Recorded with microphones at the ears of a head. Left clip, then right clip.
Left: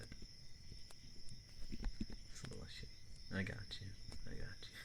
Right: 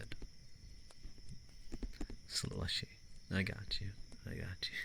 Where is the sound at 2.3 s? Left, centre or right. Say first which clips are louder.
Right 14 dB; right.